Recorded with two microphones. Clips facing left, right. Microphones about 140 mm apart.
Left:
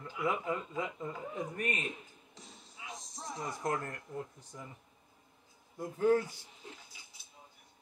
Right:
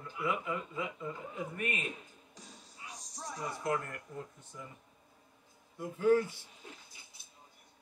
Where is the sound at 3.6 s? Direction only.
45° left (ahead or behind).